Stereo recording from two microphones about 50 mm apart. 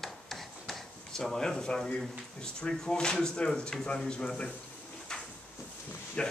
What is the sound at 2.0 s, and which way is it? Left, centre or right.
Speech, centre.